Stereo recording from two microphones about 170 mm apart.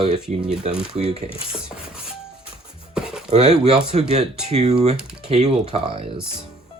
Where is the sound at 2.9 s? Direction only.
5° right (ahead or behind).